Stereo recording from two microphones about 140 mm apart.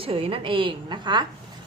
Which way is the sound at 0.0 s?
40° right (ahead or behind).